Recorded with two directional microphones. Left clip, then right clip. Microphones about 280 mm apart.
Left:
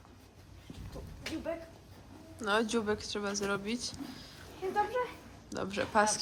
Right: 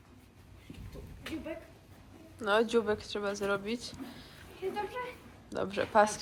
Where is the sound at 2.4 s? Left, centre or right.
Centre.